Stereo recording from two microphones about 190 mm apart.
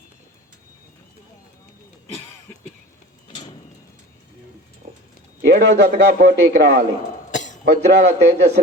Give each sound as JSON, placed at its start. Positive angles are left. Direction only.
{"t": 4.8, "sound": "a sound", "side_deg": -35}
{"t": 5.5, "sound": "a man's voice", "side_deg": -60}
{"t": 7.3, "sound": "cough", "side_deg": 40}
{"t": 7.6, "sound": "a man's voice", "side_deg": -60}